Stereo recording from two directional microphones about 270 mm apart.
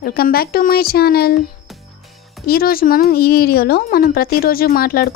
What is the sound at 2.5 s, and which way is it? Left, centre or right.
A woman's voice, left.